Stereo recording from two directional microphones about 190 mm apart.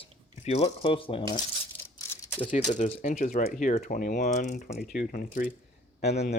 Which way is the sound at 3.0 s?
40° left (ahead or behind).